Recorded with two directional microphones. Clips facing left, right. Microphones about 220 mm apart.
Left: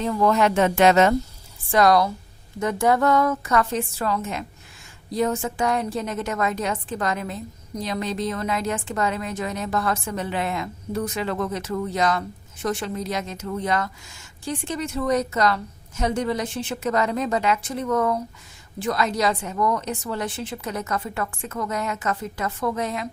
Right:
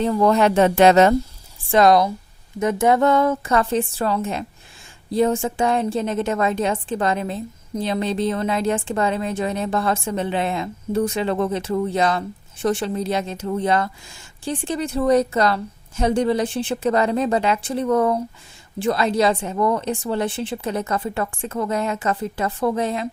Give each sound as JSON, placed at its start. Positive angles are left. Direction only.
{"t": 0.0, "sound": "a woman's voice", "side_deg": -35}
{"t": 1.7, "sound": "a woman's voice", "side_deg": -25}